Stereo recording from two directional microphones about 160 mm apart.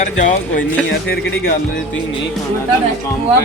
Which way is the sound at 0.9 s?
75° left (ahead or behind).